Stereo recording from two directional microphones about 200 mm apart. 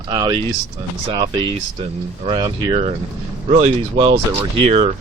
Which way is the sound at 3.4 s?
35° right (ahead or behind).